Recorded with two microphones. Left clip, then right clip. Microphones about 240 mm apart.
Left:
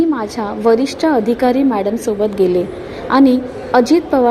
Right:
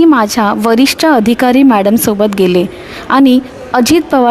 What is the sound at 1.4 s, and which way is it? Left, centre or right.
A woman's voice, right.